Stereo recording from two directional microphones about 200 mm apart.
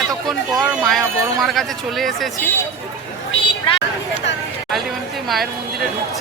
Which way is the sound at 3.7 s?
25° left (ahead or behind).